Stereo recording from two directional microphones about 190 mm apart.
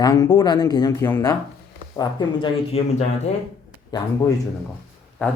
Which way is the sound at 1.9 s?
30° left (ahead or behind).